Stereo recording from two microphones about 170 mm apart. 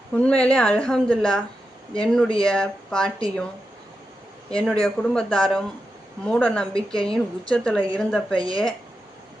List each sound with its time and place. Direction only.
0.2 s speech: 5° left (ahead or behind)
4.4 s speech: 5° left (ahead or behind)
8.4 s speech: 20° right (ahead or behind)